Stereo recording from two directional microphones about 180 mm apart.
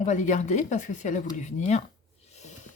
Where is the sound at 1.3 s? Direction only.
40° left (ahead or behind).